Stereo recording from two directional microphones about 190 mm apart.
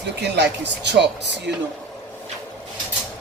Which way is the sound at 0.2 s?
65° right (ahead or behind).